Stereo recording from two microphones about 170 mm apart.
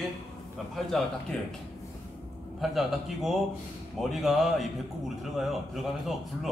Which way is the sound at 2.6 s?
Centre (ahead or behind).